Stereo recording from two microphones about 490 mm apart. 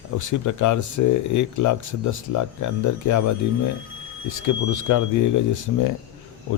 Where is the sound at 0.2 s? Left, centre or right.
Left.